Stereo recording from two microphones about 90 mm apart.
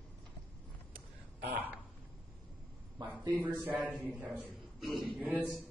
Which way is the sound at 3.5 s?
20° right (ahead or behind).